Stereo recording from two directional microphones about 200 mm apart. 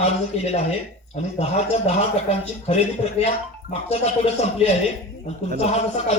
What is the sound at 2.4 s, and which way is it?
Speech, 30° left (ahead or behind).